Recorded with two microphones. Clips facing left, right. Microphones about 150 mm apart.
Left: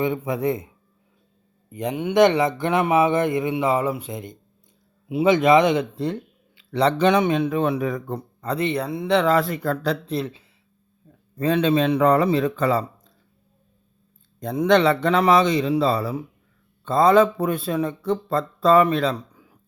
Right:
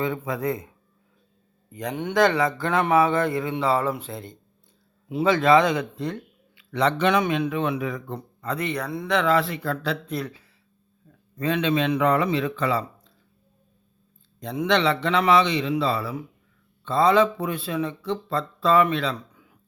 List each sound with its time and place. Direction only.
0.0 s speech: 20° left (ahead or behind)
1.7 s speech: 20° left (ahead or behind); by 10.2 s 40° left (ahead or behind)
10.2 s speech: 25° left (ahead or behind)
11.3 s speech: 35° left (ahead or behind)
14.3 s speech: 45° left (ahead or behind)